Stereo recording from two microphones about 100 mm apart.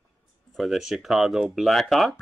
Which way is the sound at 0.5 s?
Centre (ahead or behind).